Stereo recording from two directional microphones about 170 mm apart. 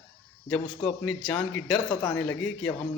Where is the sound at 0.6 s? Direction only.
30° left (ahead or behind).